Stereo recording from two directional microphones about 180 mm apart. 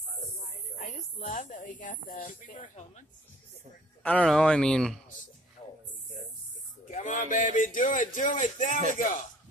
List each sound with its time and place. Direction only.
0.7 s speech: 45° left (ahead or behind)
4.0 s speech: 5° left (ahead or behind)
6.9 s speech: 45° left (ahead or behind)